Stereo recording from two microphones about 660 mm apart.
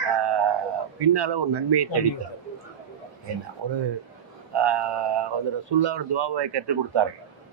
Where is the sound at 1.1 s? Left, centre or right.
Right.